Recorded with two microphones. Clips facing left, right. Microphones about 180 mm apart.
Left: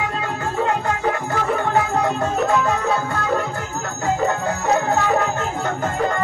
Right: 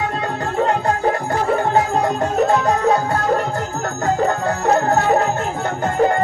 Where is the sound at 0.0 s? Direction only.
35° right (ahead or behind).